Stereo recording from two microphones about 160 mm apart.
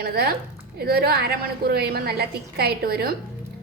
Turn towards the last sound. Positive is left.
turn(degrees=-75)  # may be behind; listen again after turning